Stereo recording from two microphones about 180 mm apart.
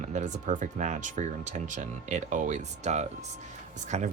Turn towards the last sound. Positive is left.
turn(degrees=-40)  # may be behind; listen again after turning